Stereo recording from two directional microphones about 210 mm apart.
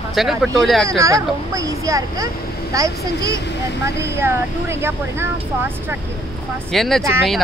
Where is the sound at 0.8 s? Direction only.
15° right (ahead or behind).